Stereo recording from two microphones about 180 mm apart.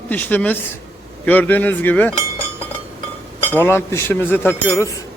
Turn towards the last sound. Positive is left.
turn(degrees=15)  # may be behind; listen again after turning